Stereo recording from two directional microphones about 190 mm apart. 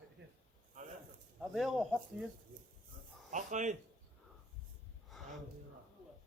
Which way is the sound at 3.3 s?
40° right (ahead or behind).